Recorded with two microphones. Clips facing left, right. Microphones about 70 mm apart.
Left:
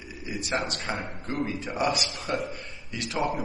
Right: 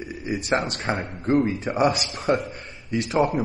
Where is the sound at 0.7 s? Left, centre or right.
Right.